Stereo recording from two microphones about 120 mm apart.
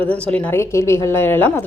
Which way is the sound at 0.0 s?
10° left (ahead or behind).